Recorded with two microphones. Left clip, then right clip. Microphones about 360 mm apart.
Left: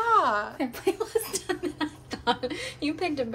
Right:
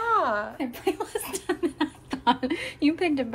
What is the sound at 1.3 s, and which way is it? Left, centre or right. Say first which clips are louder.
A woman's voice: right 2 dB; centre.